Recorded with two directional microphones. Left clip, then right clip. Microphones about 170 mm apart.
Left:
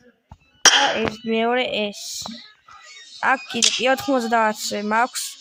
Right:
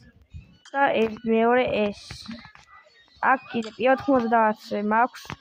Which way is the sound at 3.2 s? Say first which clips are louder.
Left 4 dB; 15° left (ahead or behind).